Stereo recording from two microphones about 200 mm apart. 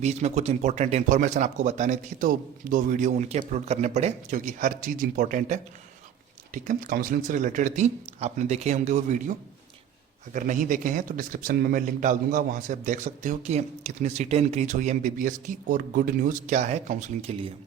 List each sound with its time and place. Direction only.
0.0 s speech: 35° right (ahead or behind)
10.3 s speech: 40° right (ahead or behind)